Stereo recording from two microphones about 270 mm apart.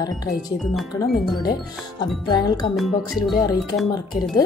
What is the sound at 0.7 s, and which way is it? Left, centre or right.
Speech, centre.